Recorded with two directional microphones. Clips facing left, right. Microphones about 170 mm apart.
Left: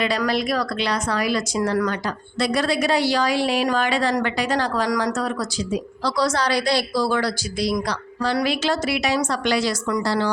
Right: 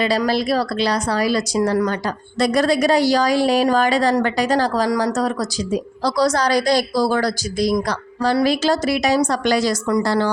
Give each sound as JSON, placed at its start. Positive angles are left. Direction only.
{"t": 0.3, "sound": "a woman's voice", "side_deg": -35}